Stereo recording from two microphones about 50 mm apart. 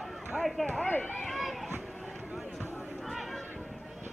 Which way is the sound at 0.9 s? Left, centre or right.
Left.